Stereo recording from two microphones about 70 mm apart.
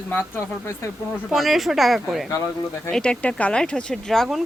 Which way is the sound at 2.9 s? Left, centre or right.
Centre.